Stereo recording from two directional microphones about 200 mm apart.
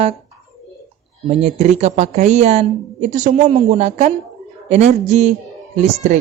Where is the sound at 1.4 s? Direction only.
30° right (ahead or behind).